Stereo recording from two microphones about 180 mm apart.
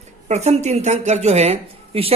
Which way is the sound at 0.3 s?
40° right (ahead or behind).